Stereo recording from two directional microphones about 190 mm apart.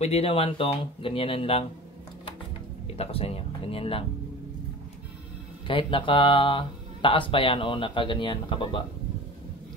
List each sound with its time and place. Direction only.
0.0 s speech: 30° left (ahead or behind)
3.0 s speech: 30° left (ahead or behind)
5.7 s speech: 25° left (ahead or behind)